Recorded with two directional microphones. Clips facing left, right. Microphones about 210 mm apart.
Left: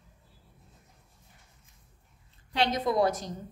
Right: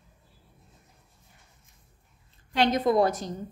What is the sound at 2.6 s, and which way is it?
Speech, 55° right (ahead or behind).